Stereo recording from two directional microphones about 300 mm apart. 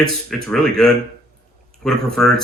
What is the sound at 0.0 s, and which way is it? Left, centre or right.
Speech, centre.